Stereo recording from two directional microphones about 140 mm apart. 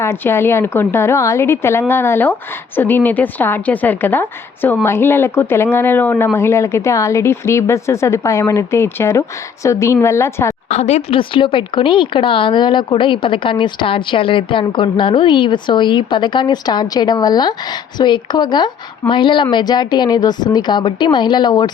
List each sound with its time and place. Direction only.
0.0 s a woman's voice: 20° left (ahead or behind)
10.7 s speech: 55° left (ahead or behind)
11.2 s a woman's voice: 35° left (ahead or behind)